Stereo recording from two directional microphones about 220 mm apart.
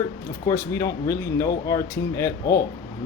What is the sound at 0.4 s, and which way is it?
Speech, 15° left (ahead or behind).